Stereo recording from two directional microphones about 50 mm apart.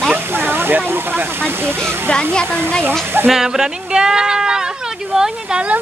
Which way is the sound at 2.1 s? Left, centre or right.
Centre.